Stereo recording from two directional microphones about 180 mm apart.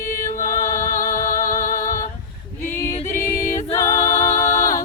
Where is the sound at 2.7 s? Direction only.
15° left (ahead or behind).